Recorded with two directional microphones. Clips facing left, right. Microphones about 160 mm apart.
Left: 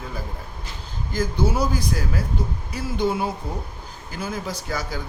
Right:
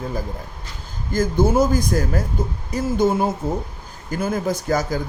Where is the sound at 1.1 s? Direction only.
45° right (ahead or behind).